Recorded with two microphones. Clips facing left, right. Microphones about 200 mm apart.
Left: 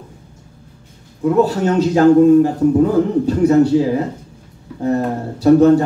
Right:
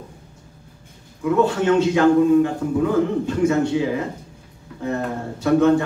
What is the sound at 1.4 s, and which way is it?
A man's voice, 40° left (ahead or behind).